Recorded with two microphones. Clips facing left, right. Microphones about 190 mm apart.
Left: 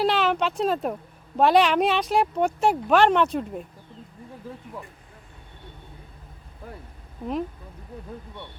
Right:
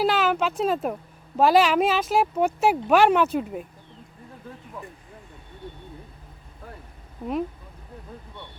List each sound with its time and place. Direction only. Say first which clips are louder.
0.0 s speech: even; centre (ahead or behind)